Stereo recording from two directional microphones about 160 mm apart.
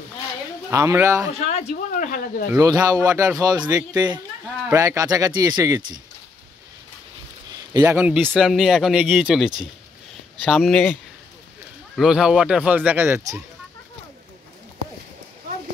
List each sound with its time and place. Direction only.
0.7 s a man's voice: 15° right (ahead or behind)
1.4 s a sound: 40° left (ahead or behind)
2.0 s speech: 60° left (ahead or behind)
2.5 s a man's voice: 20° right (ahead or behind)
7.8 s speech: 10° right (ahead or behind)
12.0 s speech: 5° right (ahead or behind)